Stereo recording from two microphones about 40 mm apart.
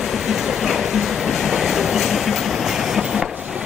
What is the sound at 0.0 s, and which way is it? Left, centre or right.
Train, centre.